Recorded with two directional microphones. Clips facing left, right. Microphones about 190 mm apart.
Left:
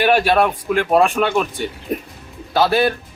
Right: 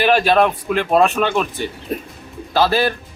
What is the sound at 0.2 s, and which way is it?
A man's voice, 10° left (ahead or behind).